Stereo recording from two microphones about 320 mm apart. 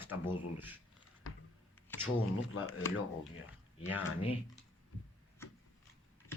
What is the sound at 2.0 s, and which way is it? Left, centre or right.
Speech, left.